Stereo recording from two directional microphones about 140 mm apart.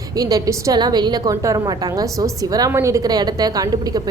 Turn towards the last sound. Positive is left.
turn(degrees=-25)  # may be behind; listen again after turning